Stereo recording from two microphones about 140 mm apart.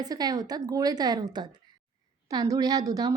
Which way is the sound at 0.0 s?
30° right (ahead or behind).